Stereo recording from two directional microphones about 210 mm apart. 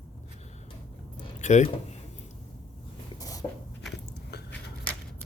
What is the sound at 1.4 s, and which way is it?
Speech, 35° left (ahead or behind).